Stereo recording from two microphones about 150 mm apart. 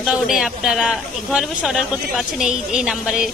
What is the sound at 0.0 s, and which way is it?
Speech, 5° right (ahead or behind).